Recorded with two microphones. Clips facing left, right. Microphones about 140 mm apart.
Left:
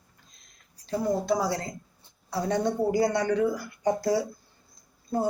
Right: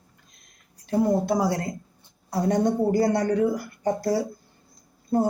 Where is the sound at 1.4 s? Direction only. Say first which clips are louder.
Right 4 dB; 45° right (ahead or behind).